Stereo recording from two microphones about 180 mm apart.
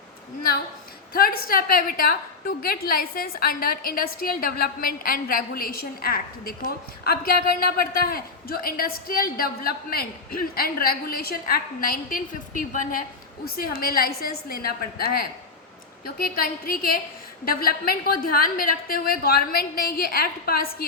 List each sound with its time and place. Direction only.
1.1 s a woman's voice: 55° left (ahead or behind)